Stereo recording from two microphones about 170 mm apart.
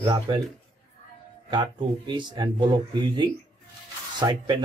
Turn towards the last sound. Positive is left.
turn(degrees=-25)  # may be behind; listen again after turning